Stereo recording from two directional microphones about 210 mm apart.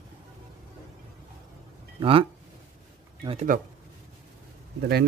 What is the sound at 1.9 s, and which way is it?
Speech, 25° right (ahead or behind).